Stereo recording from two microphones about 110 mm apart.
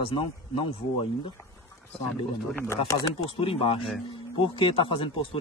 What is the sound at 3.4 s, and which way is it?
Speech, 55° left (ahead or behind).